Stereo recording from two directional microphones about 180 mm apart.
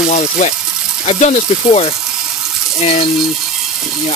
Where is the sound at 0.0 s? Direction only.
45° left (ahead or behind).